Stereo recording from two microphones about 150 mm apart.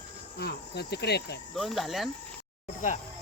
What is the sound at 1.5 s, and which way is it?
Speech, centre (ahead or behind).